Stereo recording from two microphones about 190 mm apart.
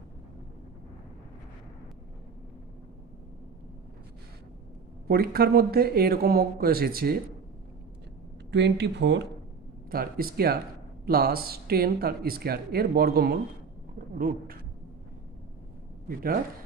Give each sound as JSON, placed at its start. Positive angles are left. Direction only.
{"t": 5.0, "sound": "speech", "side_deg": -55}
{"t": 8.4, "sound": "speech", "side_deg": -65}
{"t": 9.9, "sound": "speech", "side_deg": -50}
{"t": 16.0, "sound": "speech", "side_deg": -50}